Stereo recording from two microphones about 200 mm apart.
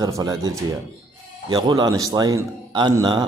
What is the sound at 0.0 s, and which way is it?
A man's voice, 20° right (ahead or behind).